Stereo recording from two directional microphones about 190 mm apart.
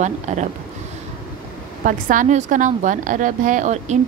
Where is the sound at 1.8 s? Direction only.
45° right (ahead or behind).